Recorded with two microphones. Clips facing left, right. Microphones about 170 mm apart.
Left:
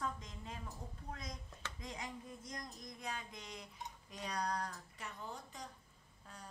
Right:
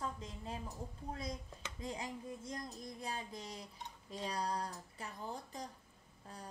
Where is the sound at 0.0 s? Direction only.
30° right (ahead or behind).